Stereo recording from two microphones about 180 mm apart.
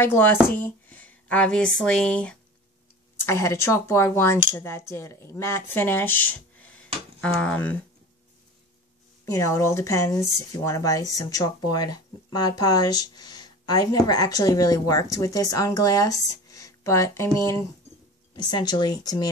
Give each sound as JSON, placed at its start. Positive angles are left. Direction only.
{"t": 0.0, "sound": "speech", "side_deg": 10}
{"t": 9.2, "sound": "speech", "side_deg": 15}